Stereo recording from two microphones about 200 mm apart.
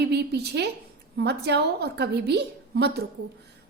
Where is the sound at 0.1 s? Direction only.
55° right (ahead or behind).